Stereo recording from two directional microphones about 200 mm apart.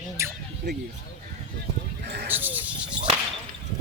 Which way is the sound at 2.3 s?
10° right (ahead or behind).